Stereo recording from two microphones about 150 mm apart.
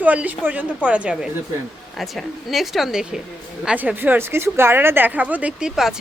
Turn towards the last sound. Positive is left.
turn(degrees=-5)  # may be behind; listen again after turning